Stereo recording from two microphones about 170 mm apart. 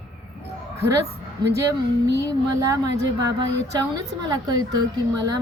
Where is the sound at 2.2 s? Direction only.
20° right (ahead or behind).